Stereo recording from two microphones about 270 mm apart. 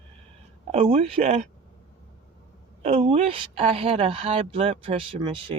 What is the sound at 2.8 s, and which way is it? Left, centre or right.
A woman's voice, right.